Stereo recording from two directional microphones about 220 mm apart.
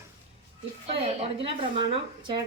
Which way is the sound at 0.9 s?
25° right (ahead or behind).